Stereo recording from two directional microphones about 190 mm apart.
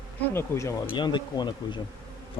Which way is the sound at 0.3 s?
15° left (ahead or behind).